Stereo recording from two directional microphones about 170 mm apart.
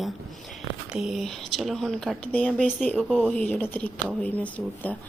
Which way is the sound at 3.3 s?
10° left (ahead or behind).